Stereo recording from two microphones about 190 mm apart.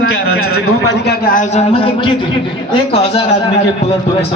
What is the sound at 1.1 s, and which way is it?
Speech, 50° left (ahead or behind).